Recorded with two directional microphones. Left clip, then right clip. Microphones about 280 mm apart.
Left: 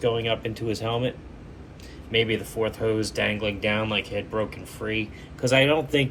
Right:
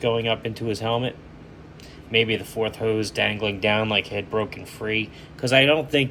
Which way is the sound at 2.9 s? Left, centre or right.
Right.